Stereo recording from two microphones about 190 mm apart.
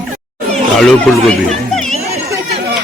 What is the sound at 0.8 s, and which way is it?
Speech, centre (ahead or behind).